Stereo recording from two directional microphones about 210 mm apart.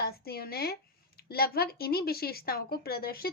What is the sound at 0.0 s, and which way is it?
Speech, 50° left (ahead or behind).